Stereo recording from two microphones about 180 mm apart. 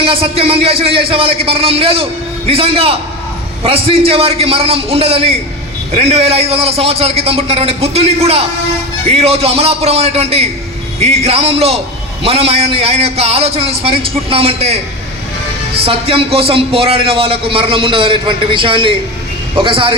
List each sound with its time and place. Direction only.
0.0 s a man's voice: 30° right (ahead or behind)
15.9 s a man's voice: 30° right (ahead or behind)